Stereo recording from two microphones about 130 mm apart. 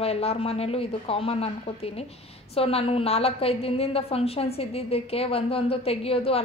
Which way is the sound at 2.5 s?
50° left (ahead or behind).